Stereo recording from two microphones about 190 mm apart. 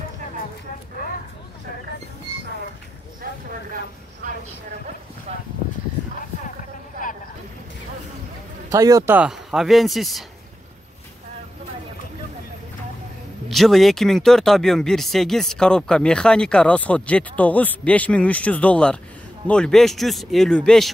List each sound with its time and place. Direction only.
5.3 s a sound: 35° right (ahead or behind)
8.6 s speech: 15° right (ahead or behind); by 10.2 s centre (ahead or behind)
13.5 s speech: centre (ahead or behind)